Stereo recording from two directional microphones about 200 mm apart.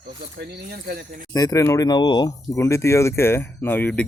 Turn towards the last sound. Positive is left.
turn(degrees=10)  # may be behind; listen again after turning